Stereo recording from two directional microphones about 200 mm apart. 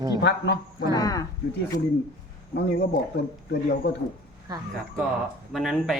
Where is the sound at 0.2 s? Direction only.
60° left (ahead or behind).